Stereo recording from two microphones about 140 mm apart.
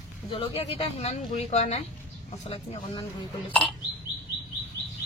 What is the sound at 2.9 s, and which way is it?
Speech, 35° left (ahead or behind).